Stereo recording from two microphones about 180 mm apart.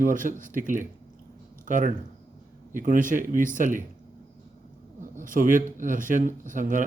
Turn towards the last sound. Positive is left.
turn(degrees=-45)  # may be behind; listen again after turning